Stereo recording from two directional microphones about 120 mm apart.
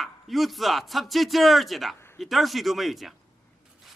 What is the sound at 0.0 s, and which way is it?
Speech, centre (ahead or behind).